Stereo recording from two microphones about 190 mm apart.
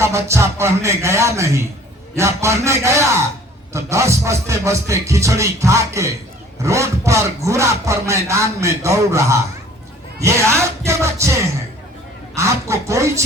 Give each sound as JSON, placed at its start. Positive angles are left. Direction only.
{"t": 0.0, "sound": "speech", "side_deg": -15}